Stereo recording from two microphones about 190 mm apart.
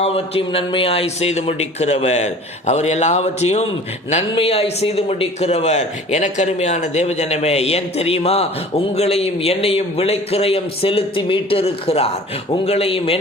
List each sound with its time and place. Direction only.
0.0 s a man's voice: 30° left (ahead or behind)